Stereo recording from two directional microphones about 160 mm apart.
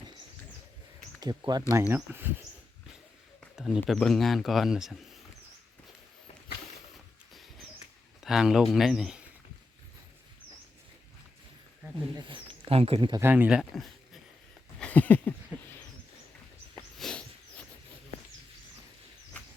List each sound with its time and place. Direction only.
1.2 s speech: 25° right (ahead or behind)
1.9 s speech: 15° right (ahead or behind)
3.4 s a sound: centre (ahead or behind)
3.9 s speech: 5° left (ahead or behind)
8.2 s speech: 5° right (ahead or behind)
11.9 s speech: 30° right (ahead or behind)
13.1 s speech: 15° right (ahead or behind)
14.8 s a sound: 10° left (ahead or behind)
17.0 s a sound: 5° left (ahead or behind)